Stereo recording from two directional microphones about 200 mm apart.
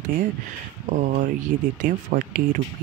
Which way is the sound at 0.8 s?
40° right (ahead or behind).